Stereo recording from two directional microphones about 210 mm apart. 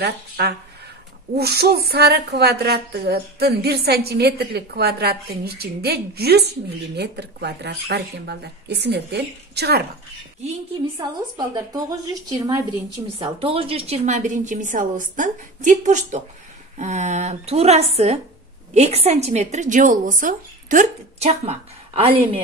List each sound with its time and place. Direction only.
0.4 s speech: 50° right (ahead or behind)
11.0 s a woman's voice: 20° right (ahead or behind)